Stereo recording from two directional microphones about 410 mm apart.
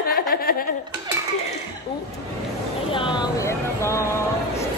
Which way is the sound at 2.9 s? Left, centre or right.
Centre.